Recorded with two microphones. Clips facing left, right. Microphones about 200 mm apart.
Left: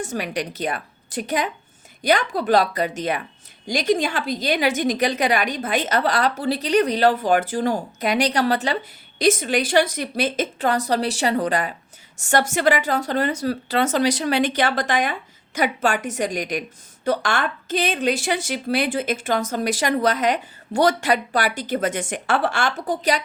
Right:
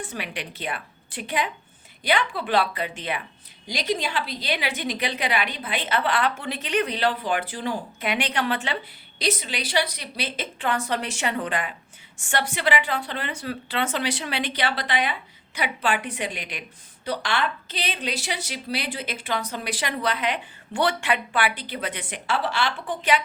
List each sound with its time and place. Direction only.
0.0 s a woman's voice: 45° left (ahead or behind)